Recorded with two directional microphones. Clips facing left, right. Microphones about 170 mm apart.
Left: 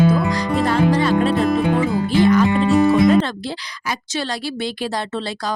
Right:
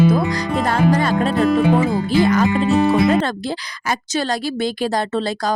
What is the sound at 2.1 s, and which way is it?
Speech, 40° right (ahead or behind).